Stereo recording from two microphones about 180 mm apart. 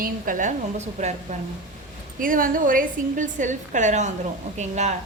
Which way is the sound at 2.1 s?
50° right (ahead or behind).